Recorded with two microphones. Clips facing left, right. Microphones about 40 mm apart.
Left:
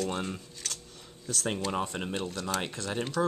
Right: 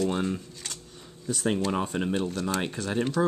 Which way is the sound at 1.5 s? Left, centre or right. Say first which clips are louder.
Right 4 dB; centre.